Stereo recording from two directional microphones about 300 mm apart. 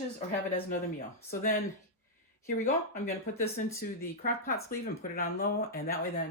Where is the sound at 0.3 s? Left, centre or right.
Left.